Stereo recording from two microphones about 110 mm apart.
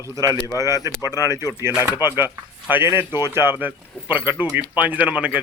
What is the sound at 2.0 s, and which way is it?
Speech, 20° right (ahead or behind).